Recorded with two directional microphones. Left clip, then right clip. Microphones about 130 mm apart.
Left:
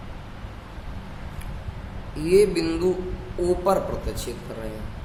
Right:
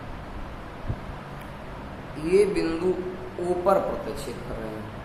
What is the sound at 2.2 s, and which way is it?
A woman's voice, 45° left (ahead or behind).